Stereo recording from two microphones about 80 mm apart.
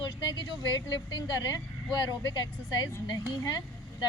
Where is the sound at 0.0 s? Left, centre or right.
Left.